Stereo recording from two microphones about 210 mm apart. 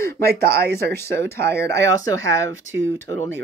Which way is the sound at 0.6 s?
50° right (ahead or behind).